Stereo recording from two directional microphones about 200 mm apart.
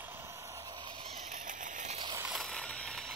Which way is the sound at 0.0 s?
10° right (ahead or behind).